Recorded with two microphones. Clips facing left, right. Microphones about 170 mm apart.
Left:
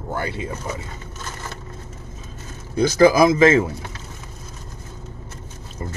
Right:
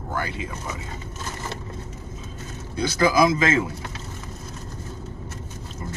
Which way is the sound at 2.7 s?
45° left (ahead or behind).